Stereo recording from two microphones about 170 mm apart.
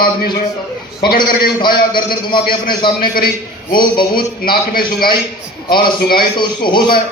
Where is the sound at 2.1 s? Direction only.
25° left (ahead or behind).